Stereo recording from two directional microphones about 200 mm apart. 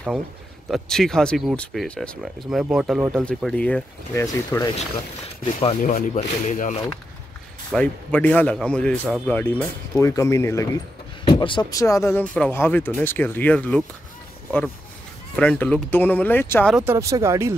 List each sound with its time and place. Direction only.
0.7 s speech: centre (ahead or behind); by 4.6 s 15° left (ahead or behind)
5.4 s speech: 30° left (ahead or behind)
7.7 s speech: 5° left (ahead or behind)
15.3 s speech: 5° left (ahead or behind)
16.7 s speech: 10° right (ahead or behind)